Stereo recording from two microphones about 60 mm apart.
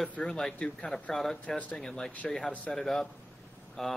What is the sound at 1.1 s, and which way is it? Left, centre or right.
Speech, centre.